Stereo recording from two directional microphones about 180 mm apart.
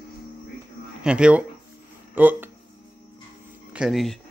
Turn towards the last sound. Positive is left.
turn(degrees=0)  # may be behind; listen again after turning